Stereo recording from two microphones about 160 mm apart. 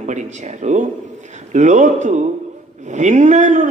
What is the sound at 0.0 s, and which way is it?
A man's voice, 50° right (ahead or behind).